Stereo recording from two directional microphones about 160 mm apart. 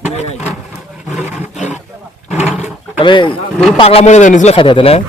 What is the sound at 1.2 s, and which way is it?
Roar, 10° right (ahead or behind).